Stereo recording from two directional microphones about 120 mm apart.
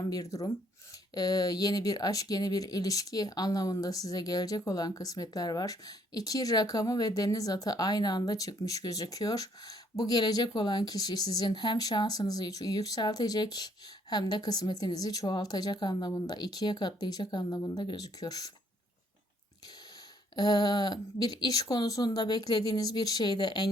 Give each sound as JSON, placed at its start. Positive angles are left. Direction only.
{"t": 0.0, "sound": "speech", "side_deg": 30}
{"t": 20.3, "sound": "speech", "side_deg": 35}